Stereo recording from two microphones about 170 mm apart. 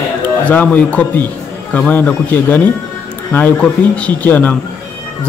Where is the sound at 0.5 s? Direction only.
10° left (ahead or behind).